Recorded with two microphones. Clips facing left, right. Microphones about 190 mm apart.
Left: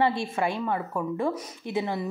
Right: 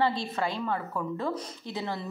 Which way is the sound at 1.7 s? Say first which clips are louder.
Left 6 dB; 20° left (ahead or behind).